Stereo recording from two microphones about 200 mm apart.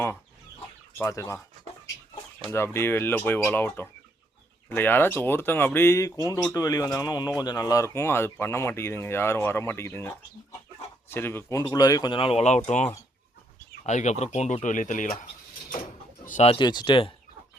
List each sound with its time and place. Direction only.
0.9 s speech: 15° left (ahead or behind)
2.5 s speech: 10° left (ahead or behind)